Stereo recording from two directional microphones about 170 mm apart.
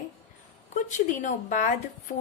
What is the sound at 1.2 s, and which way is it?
Speech, 45° left (ahead or behind).